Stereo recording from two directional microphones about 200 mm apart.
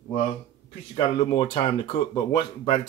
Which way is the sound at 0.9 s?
25° left (ahead or behind).